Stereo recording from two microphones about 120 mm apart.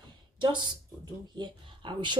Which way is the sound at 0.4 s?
40° right (ahead or behind).